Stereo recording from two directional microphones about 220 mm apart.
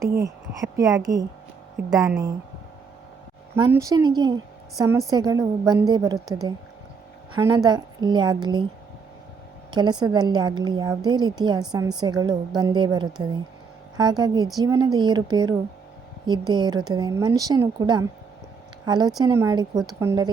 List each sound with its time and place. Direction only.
0.2 s a woman's voice: 15° right (ahead or behind)
3.5 s a woman's voice: 15° right (ahead or behind)
7.3 s speech: 15° right (ahead or behind)
9.7 s a woman's voice: 20° right (ahead or behind)